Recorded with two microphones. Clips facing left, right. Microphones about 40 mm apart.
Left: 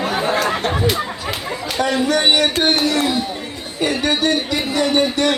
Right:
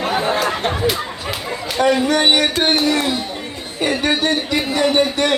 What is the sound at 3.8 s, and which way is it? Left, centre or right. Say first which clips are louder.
Speech: even; right.